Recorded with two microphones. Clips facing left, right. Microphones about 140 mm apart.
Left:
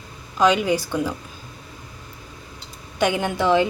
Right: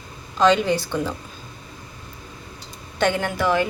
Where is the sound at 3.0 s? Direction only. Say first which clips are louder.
Even; 15° left (ahead or behind).